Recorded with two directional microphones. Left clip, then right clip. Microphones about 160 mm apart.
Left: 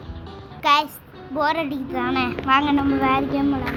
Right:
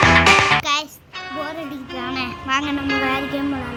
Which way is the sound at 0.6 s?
15° left (ahead or behind).